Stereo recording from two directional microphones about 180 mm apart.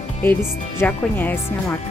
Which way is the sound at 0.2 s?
10° left (ahead or behind).